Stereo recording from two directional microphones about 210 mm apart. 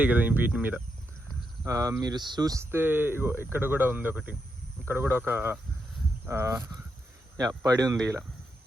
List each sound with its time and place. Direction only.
0.0 s speech: 5° right (ahead or behind)